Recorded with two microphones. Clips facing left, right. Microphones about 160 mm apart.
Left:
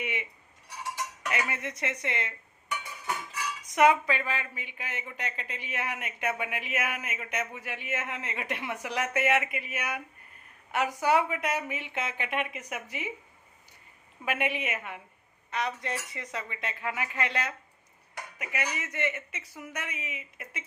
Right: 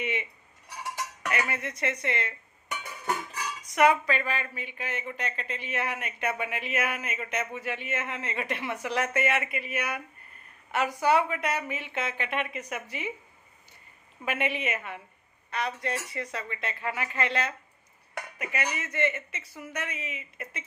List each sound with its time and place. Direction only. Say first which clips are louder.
0.0 s cutlery: right 3 dB; 10° left (ahead or behind)
1.3 s speech: right 2 dB; 20° left (ahead or behind)
3.8 s speech: even; 15° left (ahead or behind)
14.3 s speech: right 1 dB; 10° left (ahead or behind)
18.8 s speech: right 3 dB; 15° left (ahead or behind)